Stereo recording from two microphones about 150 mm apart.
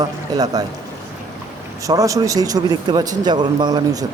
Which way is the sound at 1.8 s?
20° right (ahead or behind).